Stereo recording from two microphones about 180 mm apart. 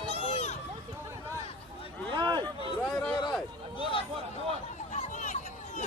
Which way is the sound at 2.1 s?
25° right (ahead or behind).